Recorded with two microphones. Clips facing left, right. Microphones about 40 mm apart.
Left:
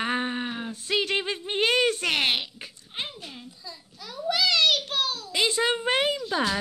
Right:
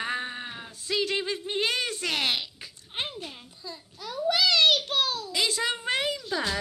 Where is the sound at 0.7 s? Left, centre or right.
Left.